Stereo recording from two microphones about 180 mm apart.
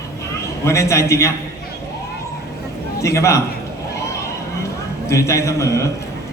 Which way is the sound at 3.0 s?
15° left (ahead or behind).